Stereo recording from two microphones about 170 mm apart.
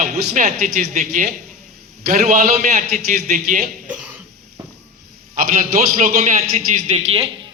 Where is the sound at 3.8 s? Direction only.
5° right (ahead or behind).